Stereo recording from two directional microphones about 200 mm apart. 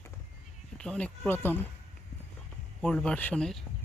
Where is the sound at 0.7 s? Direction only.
5° left (ahead or behind).